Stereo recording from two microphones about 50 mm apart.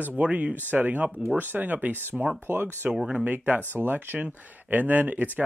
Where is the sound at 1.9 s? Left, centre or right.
Right.